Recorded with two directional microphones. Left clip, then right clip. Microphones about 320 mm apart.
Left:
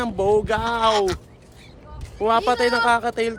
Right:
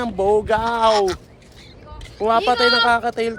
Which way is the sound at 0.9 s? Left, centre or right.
Centre.